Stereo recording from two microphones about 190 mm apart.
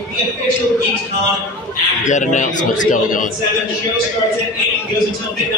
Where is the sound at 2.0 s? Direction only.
40° left (ahead or behind).